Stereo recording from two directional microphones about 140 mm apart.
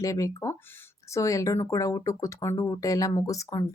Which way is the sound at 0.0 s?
25° left (ahead or behind).